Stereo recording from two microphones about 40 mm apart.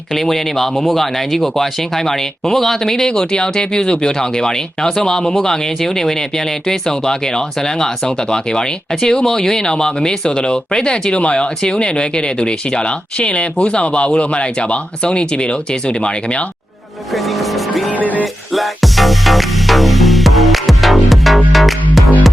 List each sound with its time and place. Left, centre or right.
0.1 s speech: centre; by 16.5 s left
17.1 s vehicle: centre
17.9 s music: left
18.5 s music: centre